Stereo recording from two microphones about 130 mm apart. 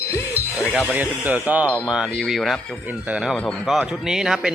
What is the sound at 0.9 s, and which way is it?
Speech, 10° right (ahead or behind).